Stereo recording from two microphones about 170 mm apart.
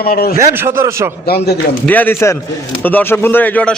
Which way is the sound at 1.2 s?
70° left (ahead or behind).